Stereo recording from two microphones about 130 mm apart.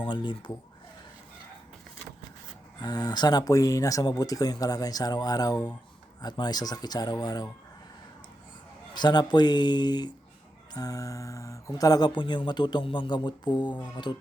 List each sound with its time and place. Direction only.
0.1 s speech: 40° left (ahead or behind)
2.8 s speech: 30° left (ahead or behind)
9.0 s speech: 35° left (ahead or behind)